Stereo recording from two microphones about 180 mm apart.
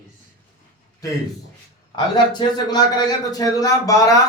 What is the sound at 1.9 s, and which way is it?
A man's voice, 25° left (ahead or behind).